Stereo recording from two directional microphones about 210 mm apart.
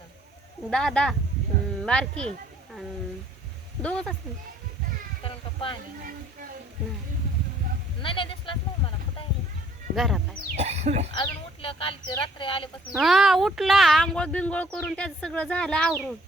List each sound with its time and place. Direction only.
0.7 s speech: 5° left (ahead or behind)
3.8 s speech: 5° left (ahead or behind)
5.2 s a sound: 25° left (ahead or behind)
8.0 s speech: 25° left (ahead or behind)
9.9 s speech: centre (ahead or behind)
10.5 s speech: 30° right (ahead or behind)
11.1 s speech: 25° left (ahead or behind)
12.9 s speech: centre (ahead or behind)